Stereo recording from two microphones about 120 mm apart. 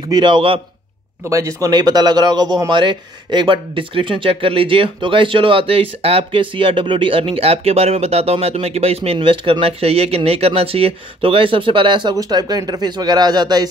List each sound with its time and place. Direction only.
0.1 s speech: 40° right (ahead or behind)
1.3 s speech: 25° right (ahead or behind)